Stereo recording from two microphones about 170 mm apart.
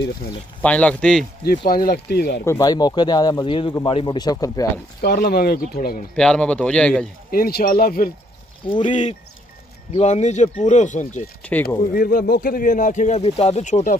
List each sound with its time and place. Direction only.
0.6 s speech: 5° left (ahead or behind)
1.7 s speech: 60° left (ahead or behind)
2.4 s speech: 20° left (ahead or behind)
5.0 s speech: 65° left (ahead or behind)
6.1 s speech: 5° left (ahead or behind)
7.2 s speech: 60° left (ahead or behind)
8.8 s speech: 45° left (ahead or behind)
11.9 s speech: 60° left (ahead or behind)